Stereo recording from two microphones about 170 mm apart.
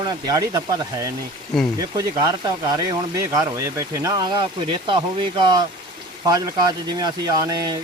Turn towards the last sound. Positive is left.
turn(degrees=-20)  # may be behind; listen again after turning